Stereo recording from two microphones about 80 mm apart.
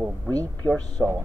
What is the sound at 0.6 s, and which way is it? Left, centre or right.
Speech, right.